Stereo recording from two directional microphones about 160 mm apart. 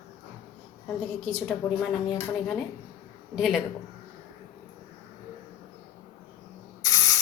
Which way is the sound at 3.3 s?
Centre (ahead or behind).